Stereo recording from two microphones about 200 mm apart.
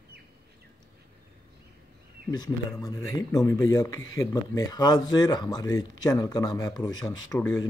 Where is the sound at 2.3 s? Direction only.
20° left (ahead or behind).